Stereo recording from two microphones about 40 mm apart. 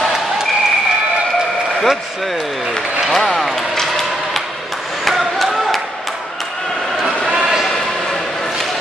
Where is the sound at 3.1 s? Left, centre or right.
Centre.